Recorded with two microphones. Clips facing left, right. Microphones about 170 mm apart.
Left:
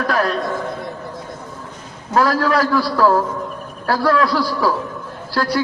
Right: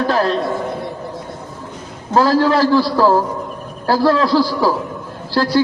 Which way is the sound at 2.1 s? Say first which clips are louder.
Right 3 dB; 30° right (ahead or behind).